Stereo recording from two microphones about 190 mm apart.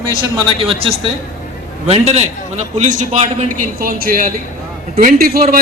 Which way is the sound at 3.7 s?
50° right (ahead or behind).